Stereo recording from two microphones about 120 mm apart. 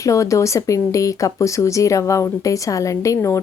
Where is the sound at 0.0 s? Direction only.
25° left (ahead or behind).